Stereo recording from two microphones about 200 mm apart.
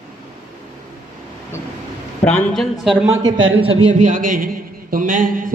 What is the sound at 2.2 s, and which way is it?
Speech, 5° left (ahead or behind).